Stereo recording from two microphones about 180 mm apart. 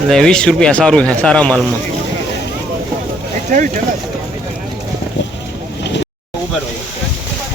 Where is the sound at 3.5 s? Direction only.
45° right (ahead or behind).